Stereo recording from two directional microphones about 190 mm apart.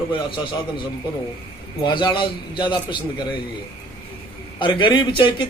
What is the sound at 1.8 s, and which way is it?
A man's voice, 25° left (ahead or behind).